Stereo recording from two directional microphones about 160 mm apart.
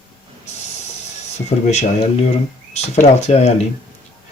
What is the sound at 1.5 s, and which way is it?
Speech, 45° left (ahead or behind).